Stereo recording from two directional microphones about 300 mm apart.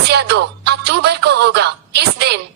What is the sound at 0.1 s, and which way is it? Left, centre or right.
A woman's voice, right.